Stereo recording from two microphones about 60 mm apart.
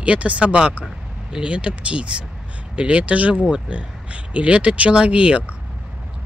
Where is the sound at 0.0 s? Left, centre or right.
Right.